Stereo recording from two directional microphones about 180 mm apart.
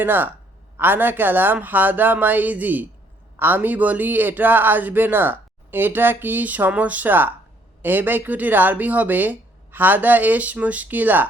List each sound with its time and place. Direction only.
0.0 s a man's voice: 10° right (ahead or behind)